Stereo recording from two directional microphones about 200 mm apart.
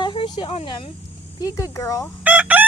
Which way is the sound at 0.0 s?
25° left (ahead or behind).